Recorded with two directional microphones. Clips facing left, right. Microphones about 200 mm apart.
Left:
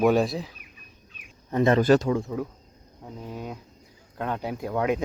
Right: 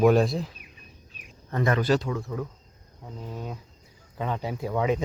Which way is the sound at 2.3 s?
15° left (ahead or behind).